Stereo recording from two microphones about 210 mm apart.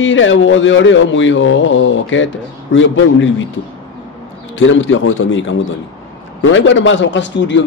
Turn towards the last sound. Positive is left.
turn(degrees=60)  # may be behind; listen again after turning